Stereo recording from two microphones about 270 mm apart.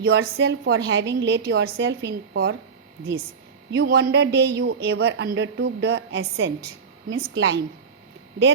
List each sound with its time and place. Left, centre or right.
0.0 s speech: right
3.7 s speech: right